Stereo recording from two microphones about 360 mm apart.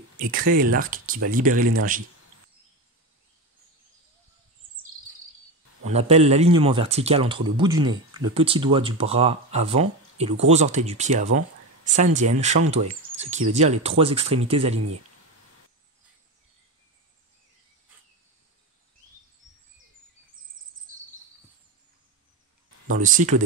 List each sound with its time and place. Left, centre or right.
0.2 s speech: right
5.9 s speech: centre
13.1 s a sound: centre
13.6 s speech: centre
22.8 s speech: right